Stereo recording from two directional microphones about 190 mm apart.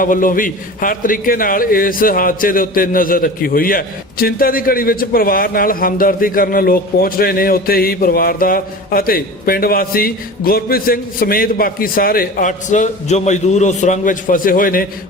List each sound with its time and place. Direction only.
0.0 s a man's voice: 45° left (ahead or behind)